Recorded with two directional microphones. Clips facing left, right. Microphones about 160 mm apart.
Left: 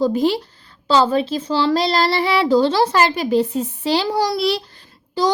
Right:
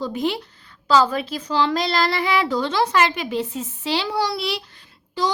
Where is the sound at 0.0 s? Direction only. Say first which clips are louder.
Left 7 dB; 35° left (ahead or behind).